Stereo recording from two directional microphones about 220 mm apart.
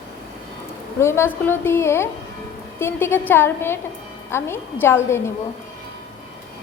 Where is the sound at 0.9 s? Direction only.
10° left (ahead or behind).